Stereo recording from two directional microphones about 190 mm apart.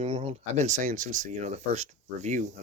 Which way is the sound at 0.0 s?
30° right (ahead or behind).